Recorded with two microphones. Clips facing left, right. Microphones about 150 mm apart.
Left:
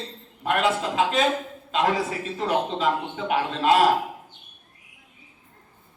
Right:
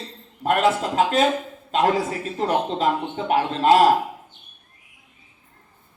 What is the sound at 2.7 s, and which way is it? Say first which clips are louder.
A man's voice: right 2 dB; 40° right (ahead or behind).